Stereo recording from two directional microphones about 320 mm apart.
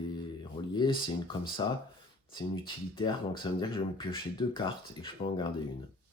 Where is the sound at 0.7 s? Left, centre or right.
Centre.